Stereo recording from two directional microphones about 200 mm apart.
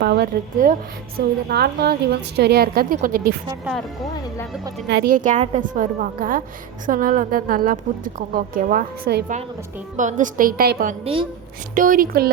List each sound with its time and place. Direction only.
0.0 s a woman's voice: 55° right (ahead or behind)
0.6 s a woman's voice: 45° right (ahead or behind)
4.9 s a woman's voice: 55° right (ahead or behind)
5.1 s a woman's voice: 40° right (ahead or behind)
11.0 s speech: 25° right (ahead or behind)
11.7 s a woman's voice: 45° right (ahead or behind)